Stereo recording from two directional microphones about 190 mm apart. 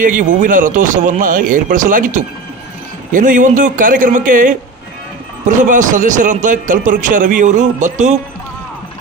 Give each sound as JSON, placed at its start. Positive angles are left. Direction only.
{"t": 0.0, "sound": "a man's voice", "side_deg": -45}